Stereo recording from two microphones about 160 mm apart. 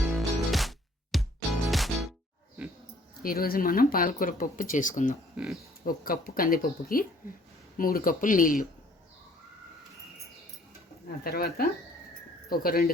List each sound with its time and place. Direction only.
0.0 s music: centre (ahead or behind)
3.2 s speech: 70° left (ahead or behind)
5.4 s speech: centre (ahead or behind)
5.8 s speech: 65° left (ahead or behind)
11.2 s speech: 70° left (ahead or behind)